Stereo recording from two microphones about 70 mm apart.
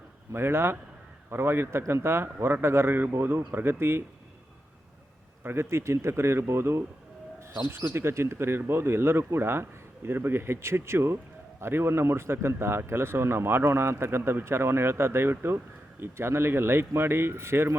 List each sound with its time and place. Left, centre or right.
0.3 s speech: right
5.4 s speech: right